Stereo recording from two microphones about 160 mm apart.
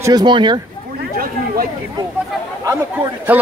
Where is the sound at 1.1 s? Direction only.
65° right (ahead or behind).